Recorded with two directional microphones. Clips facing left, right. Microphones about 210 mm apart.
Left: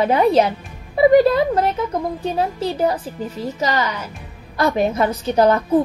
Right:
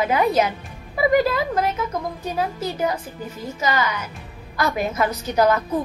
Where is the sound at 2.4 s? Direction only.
30° left (ahead or behind).